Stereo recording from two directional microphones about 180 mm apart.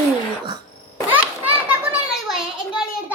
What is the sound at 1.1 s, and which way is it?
Children playing, 10° right (ahead or behind).